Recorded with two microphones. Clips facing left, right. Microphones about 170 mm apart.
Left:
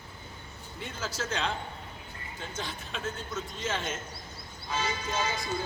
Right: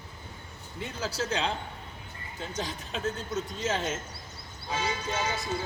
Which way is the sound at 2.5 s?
35° right (ahead or behind).